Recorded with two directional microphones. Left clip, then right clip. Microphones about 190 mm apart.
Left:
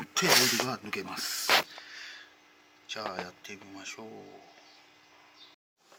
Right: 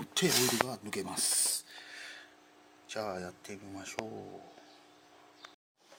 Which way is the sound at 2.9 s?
15° right (ahead or behind).